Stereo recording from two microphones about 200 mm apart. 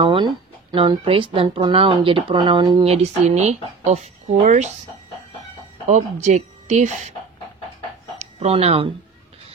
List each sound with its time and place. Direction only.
0.0 s speech: 25° right (ahead or behind)
6.2 s a woman's voice: 35° right (ahead or behind)
8.2 s speech: 35° right (ahead or behind)